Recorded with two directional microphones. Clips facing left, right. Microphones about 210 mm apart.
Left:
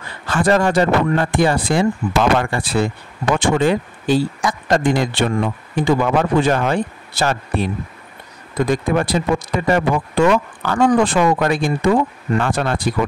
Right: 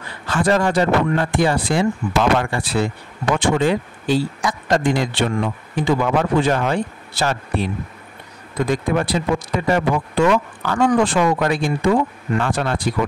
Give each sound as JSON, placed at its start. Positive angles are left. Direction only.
{"t": 0.3, "sound": "speech", "side_deg": 50}